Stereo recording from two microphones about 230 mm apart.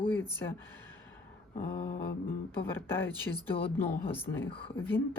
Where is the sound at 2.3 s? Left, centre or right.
Centre.